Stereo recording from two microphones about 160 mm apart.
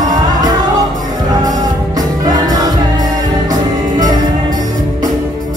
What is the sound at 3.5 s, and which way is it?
Music, 25° right (ahead or behind).